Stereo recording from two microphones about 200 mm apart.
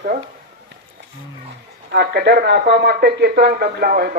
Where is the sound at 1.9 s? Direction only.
55° right (ahead or behind).